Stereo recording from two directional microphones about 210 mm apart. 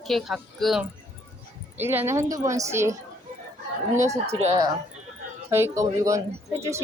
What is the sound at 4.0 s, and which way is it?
Speech, 15° right (ahead or behind).